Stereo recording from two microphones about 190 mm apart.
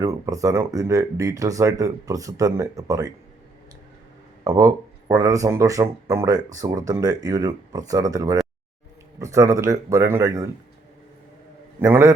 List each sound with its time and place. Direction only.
0.0 s speech: 15° right (ahead or behind)
4.4 s speech: 15° right (ahead or behind)
11.8 s speech: 15° right (ahead or behind)